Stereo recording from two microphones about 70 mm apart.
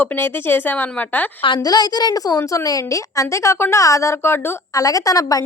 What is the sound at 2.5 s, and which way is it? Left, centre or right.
A woman's voice, left.